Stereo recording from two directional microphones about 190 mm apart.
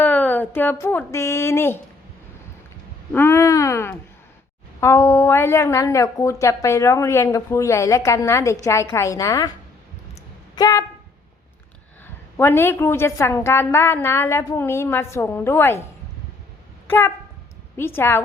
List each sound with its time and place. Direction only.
0.0 s speech: 10° left (ahead or behind)
3.1 s a woman's voice: 10° left (ahead or behind)
10.5 s speech: 20° left (ahead or behind)
12.4 s a woman's voice: 15° left (ahead or behind)
16.8 s a woman's voice: 10° left (ahead or behind)